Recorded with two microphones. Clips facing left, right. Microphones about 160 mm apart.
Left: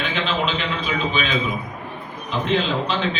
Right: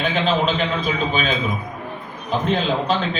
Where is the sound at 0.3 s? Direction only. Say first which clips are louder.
Right 4 dB; 40° right (ahead or behind).